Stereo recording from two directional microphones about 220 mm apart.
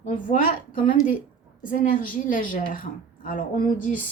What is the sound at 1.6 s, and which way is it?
Speech, 40° left (ahead or behind).